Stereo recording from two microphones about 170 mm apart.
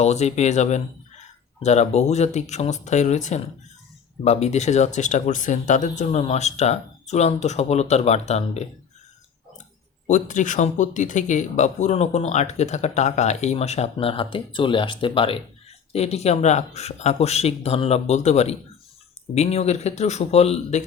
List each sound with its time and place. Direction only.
0.0 s speech: 40° left (ahead or behind)
10.1 s speech: 45° left (ahead or behind)